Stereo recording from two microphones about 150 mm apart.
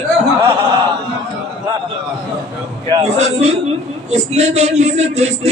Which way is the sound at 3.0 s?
45° right (ahead or behind).